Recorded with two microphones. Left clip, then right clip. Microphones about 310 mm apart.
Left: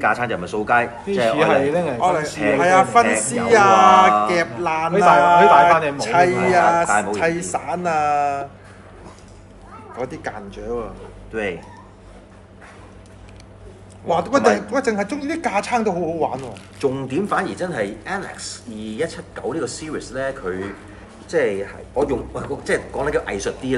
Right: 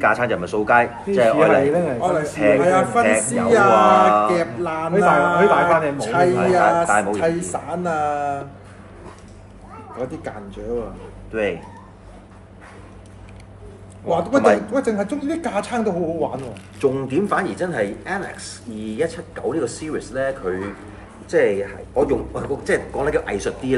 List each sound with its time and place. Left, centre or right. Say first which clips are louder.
0.0 s speech: right 2 dB; centre
2.0 s speech: left 2 dB; centre
2.2 s speech: right 1 dB; centre
4.6 s speech: left 3 dB; left
4.9 s speech: left 2 dB; centre
5.2 s speech: left 4 dB; centre
5.5 s speech: left 4 dB; centre
6.0 s speech: left 3 dB; centre
6.9 s speech: right 1 dB; centre
7.5 s speech: left 2 dB; left
11.3 s speech: right 3 dB; centre
14.0 s speech: even; centre
15.2 s speech: left 2 dB; left
16.3 s speech: right 1 dB; centre